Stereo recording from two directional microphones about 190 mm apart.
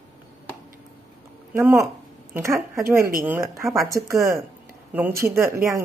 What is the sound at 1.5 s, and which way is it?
Speech, 15° right (ahead or behind).